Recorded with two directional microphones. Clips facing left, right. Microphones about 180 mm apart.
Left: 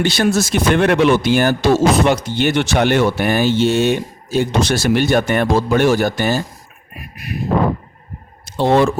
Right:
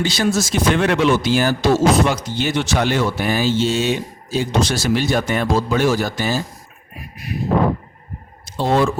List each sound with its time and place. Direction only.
0.0 s speech: 60° left (ahead or behind)
6.9 s a sound: 65° left (ahead or behind)
8.4 s speech: 65° left (ahead or behind)